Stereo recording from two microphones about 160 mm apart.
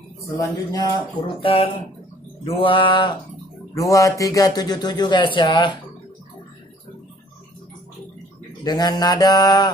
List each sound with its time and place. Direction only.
0.4 s a man's voice: 20° left (ahead or behind)
1.2 s mantra: 35° left (ahead or behind)
3.7 s a man's voice: 20° left (ahead or behind)
8.6 s a man's voice: 25° left (ahead or behind)